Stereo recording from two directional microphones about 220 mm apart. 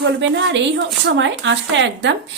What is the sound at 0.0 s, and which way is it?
A woman's voice, 55° right (ahead or behind).